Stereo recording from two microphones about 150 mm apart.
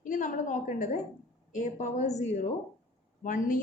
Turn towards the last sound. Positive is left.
turn(degrees=60)  # may be behind; listen again after turning